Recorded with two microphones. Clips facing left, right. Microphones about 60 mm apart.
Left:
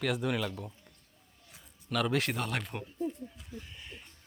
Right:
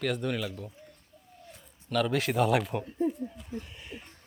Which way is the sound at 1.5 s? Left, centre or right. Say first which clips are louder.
Right 4 dB; centre.